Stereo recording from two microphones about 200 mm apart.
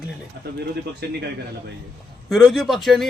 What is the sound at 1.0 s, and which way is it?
Speech, 55° right (ahead or behind).